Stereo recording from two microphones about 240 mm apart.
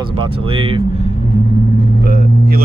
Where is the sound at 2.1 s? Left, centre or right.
Right.